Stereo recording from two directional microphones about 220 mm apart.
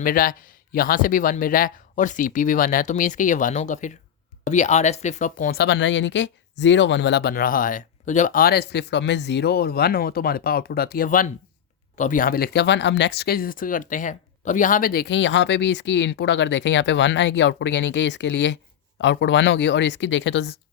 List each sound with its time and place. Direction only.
0.0 s speech: 40° left (ahead or behind)